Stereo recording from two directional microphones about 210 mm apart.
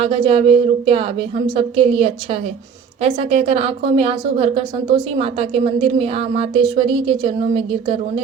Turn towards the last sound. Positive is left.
turn(degrees=-25)  # may be behind; listen again after turning